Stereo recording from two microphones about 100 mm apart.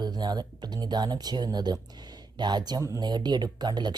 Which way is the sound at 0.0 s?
45° right (ahead or behind).